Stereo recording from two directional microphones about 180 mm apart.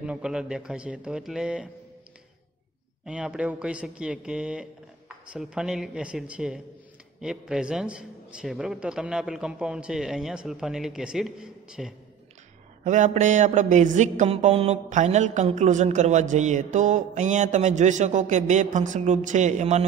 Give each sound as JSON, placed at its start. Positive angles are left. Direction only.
{"t": 0.0, "sound": "a man's voice", "side_deg": -5}
{"t": 3.1, "sound": "a man's voice", "side_deg": -5}
{"t": 12.8, "sound": "mantra", "side_deg": -45}